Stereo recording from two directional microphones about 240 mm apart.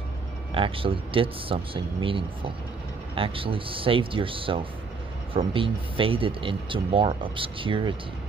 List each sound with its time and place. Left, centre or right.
0.5 s speech: right